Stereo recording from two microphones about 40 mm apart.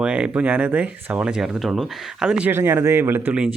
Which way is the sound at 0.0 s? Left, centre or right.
Right.